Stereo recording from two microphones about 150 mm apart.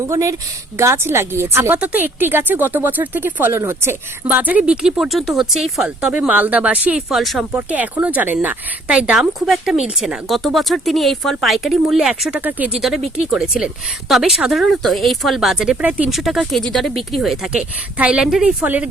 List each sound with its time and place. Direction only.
0.1 s speech: 20° right (ahead or behind)